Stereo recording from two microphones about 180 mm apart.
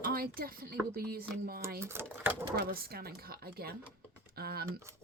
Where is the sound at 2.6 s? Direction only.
60° right (ahead or behind).